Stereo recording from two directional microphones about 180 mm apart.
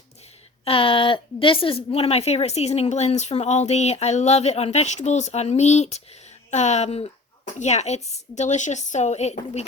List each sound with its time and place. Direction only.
0.6 s a woman's voice: 30° left (ahead or behind)